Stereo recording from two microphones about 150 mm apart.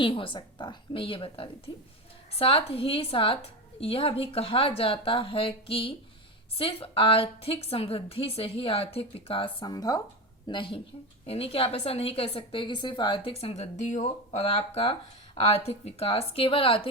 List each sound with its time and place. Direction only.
0.0 s a woman's voice: 35° left (ahead or behind)